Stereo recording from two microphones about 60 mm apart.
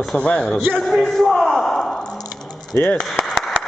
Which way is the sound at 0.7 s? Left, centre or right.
Centre.